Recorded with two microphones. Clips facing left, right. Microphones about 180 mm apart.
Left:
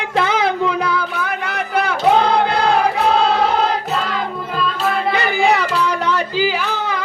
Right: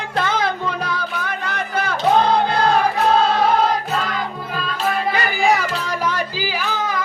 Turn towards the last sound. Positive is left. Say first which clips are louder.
# left 2 dB
turn(degrees=70)  # may be behind; listen again after turning